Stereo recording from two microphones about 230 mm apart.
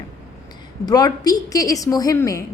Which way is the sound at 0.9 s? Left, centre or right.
Centre.